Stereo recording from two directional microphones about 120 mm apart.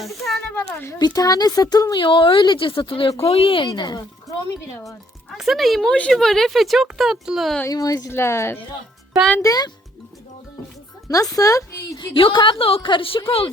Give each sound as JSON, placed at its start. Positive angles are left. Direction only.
{"t": 0.0, "sound": "speech", "side_deg": 0}
{"t": 0.9, "sound": "a woman's voice", "side_deg": 35}
{"t": 3.7, "sound": "speech", "side_deg": 35}
{"t": 5.4, "sound": "speech", "side_deg": 0}
{"t": 7.7, "sound": "speech", "side_deg": 30}
{"t": 9.4, "sound": "speech", "side_deg": 30}
{"t": 11.1, "sound": "speech", "side_deg": 30}
{"t": 12.0, "sound": "a woman's voice", "side_deg": 45}